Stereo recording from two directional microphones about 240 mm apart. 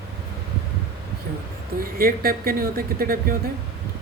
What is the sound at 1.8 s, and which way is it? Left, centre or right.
Speech, right.